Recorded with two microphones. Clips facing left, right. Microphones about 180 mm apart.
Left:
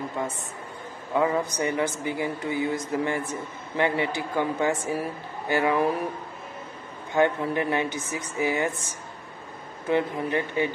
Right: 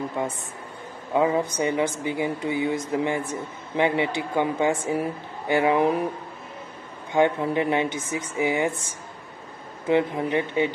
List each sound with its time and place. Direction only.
1.1 s a woman's voice: 20° right (ahead or behind)
7.2 s speech: 20° right (ahead or behind)
9.8 s speech: 20° right (ahead or behind)